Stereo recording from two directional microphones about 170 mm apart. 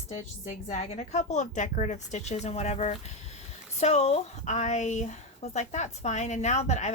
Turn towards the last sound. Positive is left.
turn(degrees=40)  # may be behind; listen again after turning